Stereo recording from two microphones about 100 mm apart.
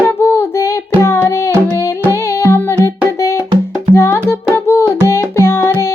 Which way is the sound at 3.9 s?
25° left (ahead or behind).